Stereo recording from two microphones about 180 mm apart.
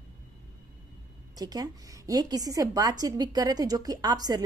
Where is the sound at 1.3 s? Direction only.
20° right (ahead or behind).